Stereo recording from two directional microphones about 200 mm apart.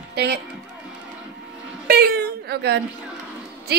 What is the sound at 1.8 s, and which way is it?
Whimper, 50° right (ahead or behind).